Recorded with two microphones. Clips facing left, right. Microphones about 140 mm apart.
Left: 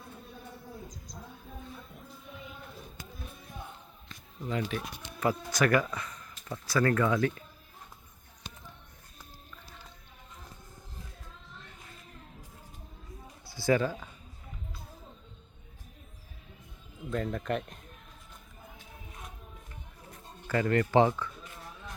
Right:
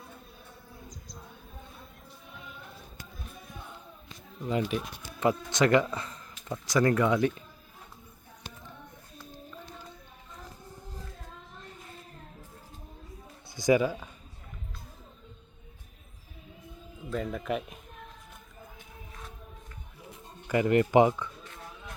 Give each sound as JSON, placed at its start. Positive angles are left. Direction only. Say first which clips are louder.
{"t": 4.4, "sound": "speech", "louder": "right 4 dB", "side_deg": -20}
{"t": 6.5, "sound": "speech", "louder": "right 2 dB", "side_deg": -15}
{"t": 13.5, "sound": "speech", "louder": "right 3 dB", "side_deg": -15}
{"t": 17.1, "sound": "speech", "louder": "even", "side_deg": -5}
{"t": 20.1, "sound": "a sound", "louder": "right 2 dB", "side_deg": -15}